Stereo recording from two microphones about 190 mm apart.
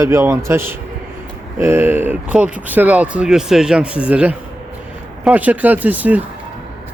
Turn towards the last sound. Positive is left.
turn(degrees=-10)  # may be behind; listen again after turning